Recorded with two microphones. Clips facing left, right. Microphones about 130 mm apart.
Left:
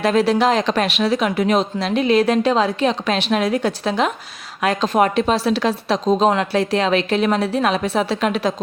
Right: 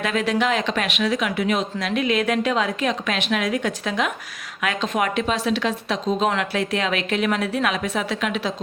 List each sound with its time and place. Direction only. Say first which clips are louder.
0.0 s speech: left 6 dB; 35° left (ahead or behind)